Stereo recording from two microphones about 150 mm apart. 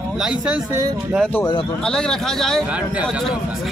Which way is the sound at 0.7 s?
25° right (ahead or behind).